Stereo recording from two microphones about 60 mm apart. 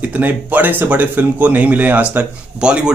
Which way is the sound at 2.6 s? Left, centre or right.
Centre.